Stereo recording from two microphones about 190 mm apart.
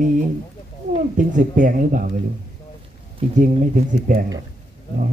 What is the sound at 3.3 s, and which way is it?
Speech, 40° right (ahead or behind).